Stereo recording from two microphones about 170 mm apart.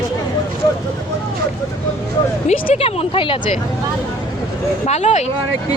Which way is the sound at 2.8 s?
35° left (ahead or behind).